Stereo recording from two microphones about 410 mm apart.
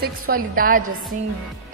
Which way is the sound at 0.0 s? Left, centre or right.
Right.